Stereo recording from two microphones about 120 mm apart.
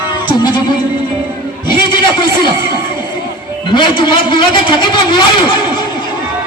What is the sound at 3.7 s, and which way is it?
A man's voice, 40° left (ahead or behind).